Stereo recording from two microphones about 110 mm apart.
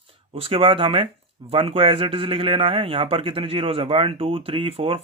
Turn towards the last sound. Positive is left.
turn(degrees=-55)  # may be behind; listen again after turning